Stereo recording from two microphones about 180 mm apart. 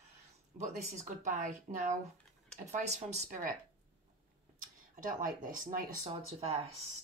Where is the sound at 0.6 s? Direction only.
40° right (ahead or behind).